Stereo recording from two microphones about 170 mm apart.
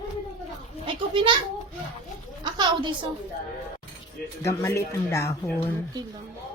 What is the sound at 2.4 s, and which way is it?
Speech, 25° right (ahead or behind).